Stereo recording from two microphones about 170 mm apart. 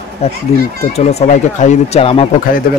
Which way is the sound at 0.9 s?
40° left (ahead or behind).